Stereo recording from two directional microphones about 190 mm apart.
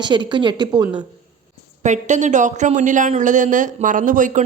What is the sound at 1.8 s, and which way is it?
Speech, 40° right (ahead or behind).